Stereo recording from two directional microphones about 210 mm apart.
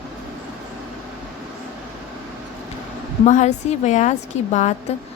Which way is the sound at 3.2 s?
35° left (ahead or behind).